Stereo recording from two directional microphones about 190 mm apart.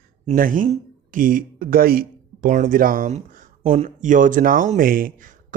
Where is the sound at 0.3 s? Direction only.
45° right (ahead or behind).